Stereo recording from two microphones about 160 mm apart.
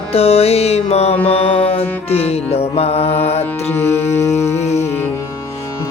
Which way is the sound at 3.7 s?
15° left (ahead or behind).